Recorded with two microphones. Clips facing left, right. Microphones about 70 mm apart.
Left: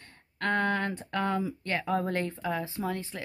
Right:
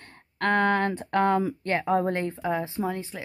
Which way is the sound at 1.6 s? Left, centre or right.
Right.